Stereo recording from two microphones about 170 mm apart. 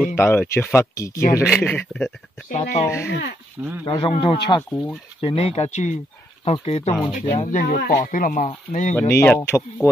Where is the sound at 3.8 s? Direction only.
25° left (ahead or behind); by 7.8 s 50° left (ahead or behind).